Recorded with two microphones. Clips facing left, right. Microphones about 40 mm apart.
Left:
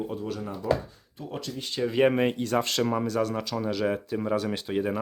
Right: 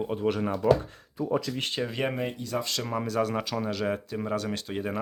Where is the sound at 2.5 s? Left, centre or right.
Left.